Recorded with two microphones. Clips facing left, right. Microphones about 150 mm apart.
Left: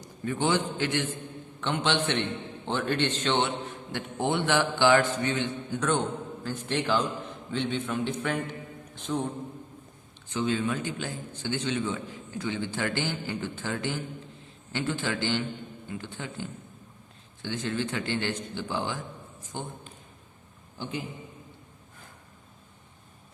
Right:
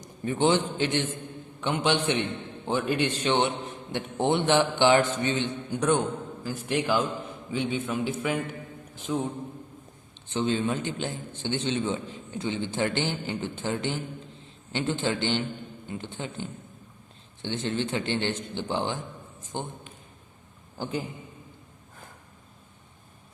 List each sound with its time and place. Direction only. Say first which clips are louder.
0.0 s a man's voice: right 4 dB; 20° right (ahead or behind); by 9.3 s 5° right (ahead or behind)
10.2 s a man's voice: right 2 dB; 25° right (ahead or behind)
20.7 s a man's voice: right 4 dB; 45° right (ahead or behind)